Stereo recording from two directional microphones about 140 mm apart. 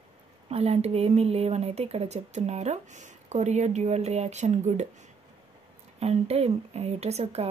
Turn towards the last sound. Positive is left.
turn(degrees=-45)  # may be behind; listen again after turning